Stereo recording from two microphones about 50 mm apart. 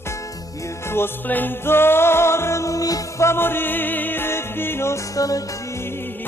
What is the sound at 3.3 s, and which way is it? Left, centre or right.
Music, left.